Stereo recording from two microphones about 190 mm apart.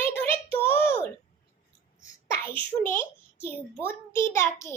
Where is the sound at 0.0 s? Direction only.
10° left (ahead or behind).